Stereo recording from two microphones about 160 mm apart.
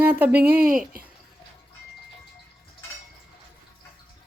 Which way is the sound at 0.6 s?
65° right (ahead or behind).